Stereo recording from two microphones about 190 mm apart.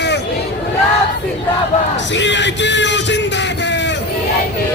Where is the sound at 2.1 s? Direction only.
70° left (ahead or behind).